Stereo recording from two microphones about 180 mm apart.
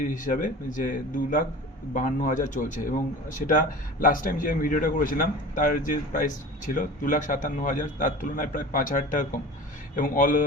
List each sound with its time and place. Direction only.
0.0 s speech: 45° left (ahead or behind)